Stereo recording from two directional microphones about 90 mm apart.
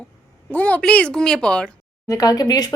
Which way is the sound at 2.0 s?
40° left (ahead or behind).